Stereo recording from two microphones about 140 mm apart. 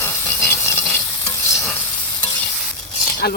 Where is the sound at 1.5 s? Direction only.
15° left (ahead or behind).